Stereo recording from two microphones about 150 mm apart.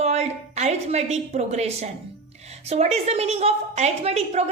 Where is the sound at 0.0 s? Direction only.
45° right (ahead or behind).